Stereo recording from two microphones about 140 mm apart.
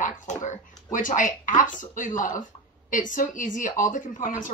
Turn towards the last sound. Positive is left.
turn(degrees=70)  # may be behind; listen again after turning